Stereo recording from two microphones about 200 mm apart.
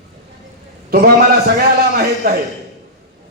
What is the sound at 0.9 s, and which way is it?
A man's voice, 50° right (ahead or behind).